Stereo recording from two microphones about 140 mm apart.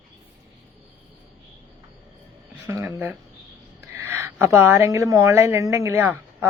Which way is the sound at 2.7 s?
15° right (ahead or behind).